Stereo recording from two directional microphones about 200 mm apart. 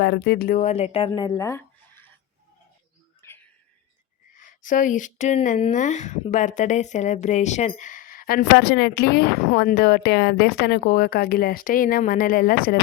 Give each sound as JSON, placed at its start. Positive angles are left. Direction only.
{"t": 0.0, "sound": "speech", "side_deg": 55}
{"t": 3.2, "sound": "a sound", "side_deg": 10}
{"t": 4.4, "sound": "speech", "side_deg": 40}